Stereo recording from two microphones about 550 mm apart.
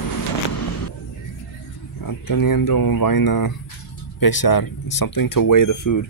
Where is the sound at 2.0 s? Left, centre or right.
Left.